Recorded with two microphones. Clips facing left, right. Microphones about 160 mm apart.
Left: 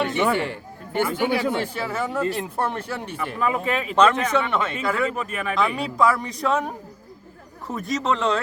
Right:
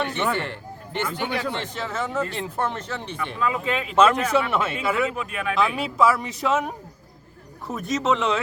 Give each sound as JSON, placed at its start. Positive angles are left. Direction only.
{"t": 0.0, "sound": "speech", "side_deg": 10}
{"t": 3.9, "sound": "speech", "side_deg": -5}
{"t": 7.7, "sound": "speech", "side_deg": 0}